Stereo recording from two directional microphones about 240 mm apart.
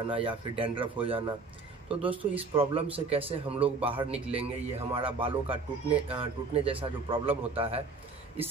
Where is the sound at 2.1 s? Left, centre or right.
Centre.